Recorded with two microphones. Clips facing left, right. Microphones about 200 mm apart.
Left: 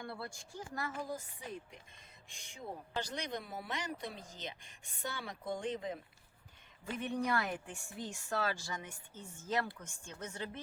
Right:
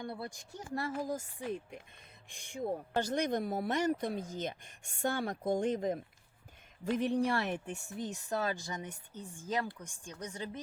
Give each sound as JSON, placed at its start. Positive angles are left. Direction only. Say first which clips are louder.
{"t": 0.0, "sound": "speech", "louder": "right 4 dB", "side_deg": -20}
{"t": 2.3, "sound": "speech", "louder": "right 10 dB", "side_deg": -50}
{"t": 7.0, "sound": "speech", "louder": "right 3 dB", "side_deg": -30}